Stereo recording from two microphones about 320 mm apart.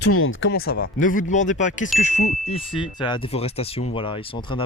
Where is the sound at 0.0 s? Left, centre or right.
Left.